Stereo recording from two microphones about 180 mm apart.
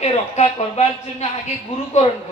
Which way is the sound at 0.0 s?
35° left (ahead or behind).